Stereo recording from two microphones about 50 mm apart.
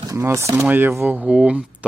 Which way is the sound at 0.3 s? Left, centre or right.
Right.